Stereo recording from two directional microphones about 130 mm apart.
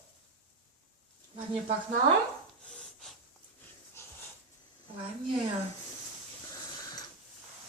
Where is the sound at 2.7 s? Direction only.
5° left (ahead or behind).